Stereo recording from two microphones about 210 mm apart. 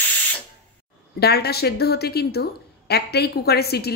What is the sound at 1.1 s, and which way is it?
A woman's voice, 50° left (ahead or behind).